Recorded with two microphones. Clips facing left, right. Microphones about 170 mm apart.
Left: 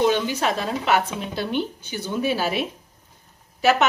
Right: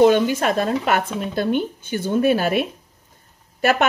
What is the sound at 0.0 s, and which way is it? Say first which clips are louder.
A woman's voice: right 6 dB; 50° right (ahead or behind).